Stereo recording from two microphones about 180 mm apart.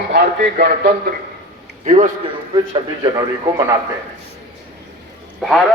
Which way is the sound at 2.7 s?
25° right (ahead or behind).